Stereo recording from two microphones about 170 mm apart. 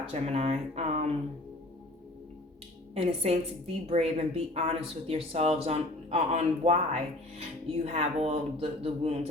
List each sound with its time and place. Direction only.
0.0 s speech: 35° right (ahead or behind)
3.2 s speech: 40° right (ahead or behind)